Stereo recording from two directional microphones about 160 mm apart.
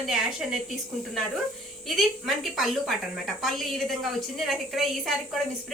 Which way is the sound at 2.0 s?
Centre (ahead or behind).